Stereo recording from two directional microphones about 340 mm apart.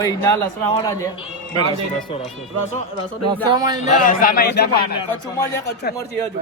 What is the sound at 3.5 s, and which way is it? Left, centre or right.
Speech, centre.